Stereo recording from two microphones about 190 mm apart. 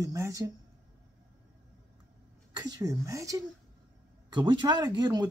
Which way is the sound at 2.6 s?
20° right (ahead or behind).